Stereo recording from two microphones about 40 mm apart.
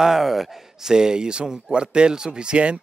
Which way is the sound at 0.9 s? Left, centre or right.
Centre.